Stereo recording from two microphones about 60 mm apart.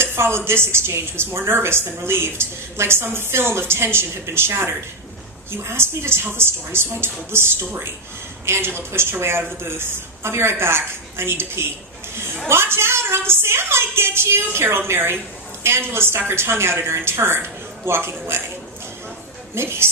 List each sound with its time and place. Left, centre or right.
0.0 s a woman's voice: right
19.5 s a woman's voice: right